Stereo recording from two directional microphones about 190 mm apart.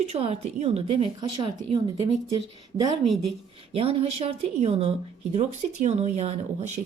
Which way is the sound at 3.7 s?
30° right (ahead or behind).